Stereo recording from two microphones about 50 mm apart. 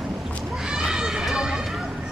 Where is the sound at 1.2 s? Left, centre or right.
Centre.